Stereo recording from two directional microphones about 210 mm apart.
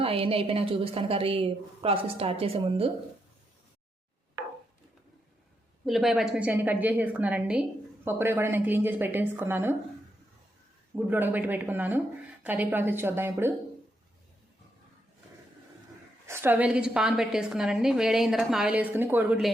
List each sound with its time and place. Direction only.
0.0 s a woman's voice: 25° right (ahead or behind)
5.8 s speech: centre (ahead or behind)
10.9 s speech: 10° right (ahead or behind)
16.2 s a woman's voice: 10° right (ahead or behind)